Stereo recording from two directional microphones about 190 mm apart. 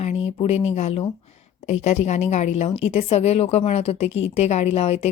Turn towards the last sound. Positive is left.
turn(degrees=30)  # may be behind; listen again after turning